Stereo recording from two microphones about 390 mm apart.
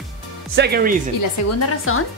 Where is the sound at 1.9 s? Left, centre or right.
Left.